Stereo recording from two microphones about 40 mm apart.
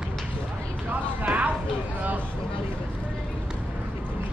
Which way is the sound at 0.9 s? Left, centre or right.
Right.